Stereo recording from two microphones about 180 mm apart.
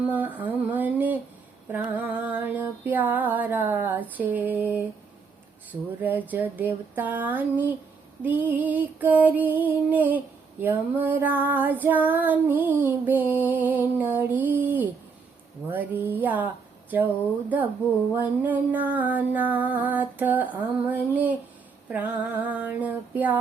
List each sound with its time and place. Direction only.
0.1 s music: 10° right (ahead or behind)
6.0 s music: 10° right (ahead or behind)
18.1 s music: 10° right (ahead or behind)